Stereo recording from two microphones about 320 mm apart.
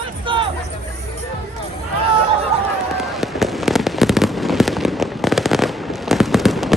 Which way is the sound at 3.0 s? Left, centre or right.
Centre.